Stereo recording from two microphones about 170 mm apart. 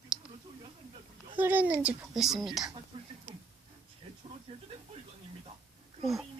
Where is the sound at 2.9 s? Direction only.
30° right (ahead or behind).